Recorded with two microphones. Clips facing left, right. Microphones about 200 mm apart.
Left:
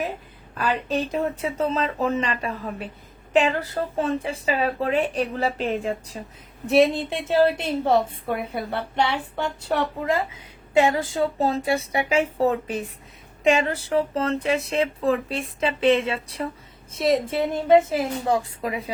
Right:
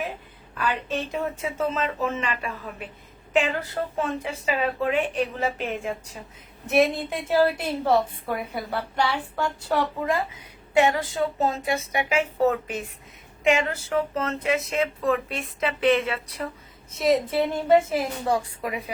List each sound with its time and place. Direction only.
0.5 s a woman's voice: 40° left (ahead or behind)